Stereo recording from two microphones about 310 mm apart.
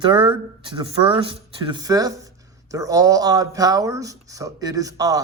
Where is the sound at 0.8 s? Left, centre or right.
Centre.